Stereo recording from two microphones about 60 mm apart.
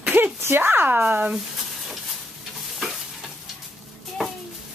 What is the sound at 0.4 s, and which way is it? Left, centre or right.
Speech, right.